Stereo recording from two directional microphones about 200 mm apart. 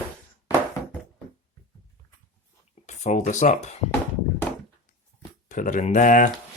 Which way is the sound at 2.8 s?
35° left (ahead or behind).